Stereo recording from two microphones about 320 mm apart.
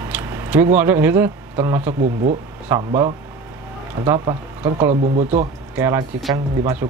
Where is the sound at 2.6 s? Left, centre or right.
Centre.